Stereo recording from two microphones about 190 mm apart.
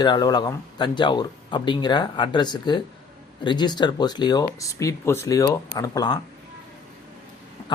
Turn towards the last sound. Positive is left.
turn(degrees=20)  # may be behind; listen again after turning